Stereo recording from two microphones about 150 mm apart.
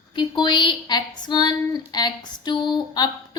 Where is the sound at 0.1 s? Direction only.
30° left (ahead or behind).